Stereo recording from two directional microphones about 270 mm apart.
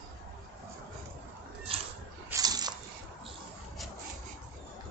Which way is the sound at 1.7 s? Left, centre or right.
Right.